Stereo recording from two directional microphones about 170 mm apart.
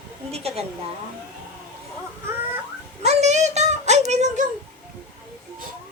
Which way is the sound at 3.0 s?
40° right (ahead or behind).